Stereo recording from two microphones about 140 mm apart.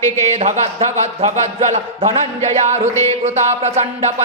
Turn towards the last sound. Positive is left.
turn(degrees=-50)  # may be behind; listen again after turning